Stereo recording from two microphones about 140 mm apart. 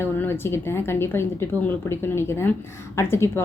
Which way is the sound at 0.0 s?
15° left (ahead or behind).